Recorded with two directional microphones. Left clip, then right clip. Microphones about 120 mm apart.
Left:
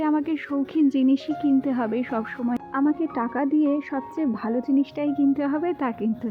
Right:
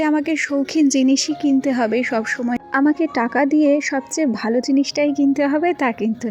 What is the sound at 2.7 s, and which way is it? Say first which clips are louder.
A woman's voice: right 7 dB; 45° right (ahead or behind).